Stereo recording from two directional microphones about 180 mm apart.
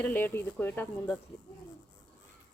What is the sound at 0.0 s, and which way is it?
Speech, 10° left (ahead or behind).